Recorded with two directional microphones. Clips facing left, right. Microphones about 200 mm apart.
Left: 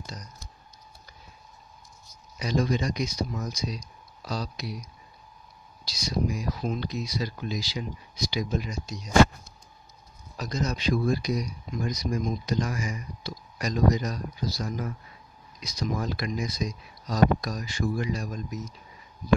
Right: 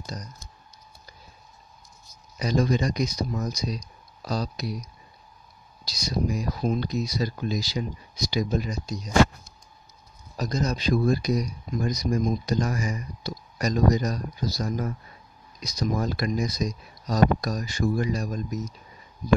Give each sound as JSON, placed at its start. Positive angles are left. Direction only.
{"t": 0.0, "sound": "typing", "side_deg": -40}
{"t": 2.3, "sound": "speech", "side_deg": -40}
{"t": 5.9, "sound": "speech", "side_deg": -40}
{"t": 10.3, "sound": "speech", "side_deg": -40}